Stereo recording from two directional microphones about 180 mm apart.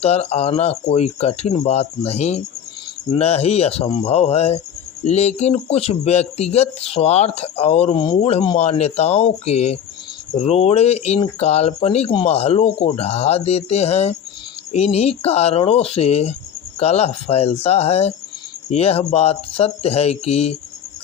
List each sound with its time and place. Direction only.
0.0 s speech: 35° left (ahead or behind)